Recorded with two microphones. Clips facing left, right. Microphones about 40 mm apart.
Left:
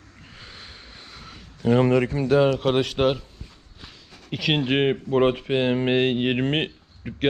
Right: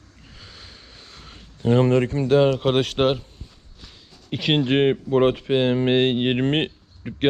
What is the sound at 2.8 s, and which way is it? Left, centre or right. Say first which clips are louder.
Speech: right 1 dB; right.